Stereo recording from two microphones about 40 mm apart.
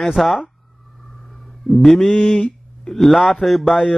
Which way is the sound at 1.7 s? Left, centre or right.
Centre.